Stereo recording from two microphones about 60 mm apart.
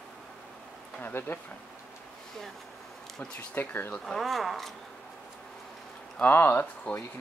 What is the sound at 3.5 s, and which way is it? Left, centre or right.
Speech, left.